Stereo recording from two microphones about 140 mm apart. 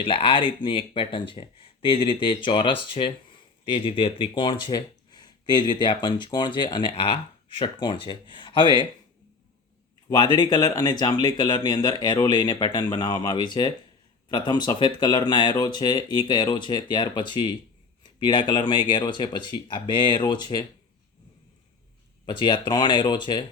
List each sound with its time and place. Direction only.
0.0 s speech: 40° left (ahead or behind)
10.1 s speech: 30° left (ahead or behind)
22.3 s speech: 35° left (ahead or behind)